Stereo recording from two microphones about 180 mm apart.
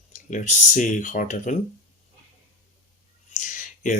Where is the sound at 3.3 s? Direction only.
45° left (ahead or behind).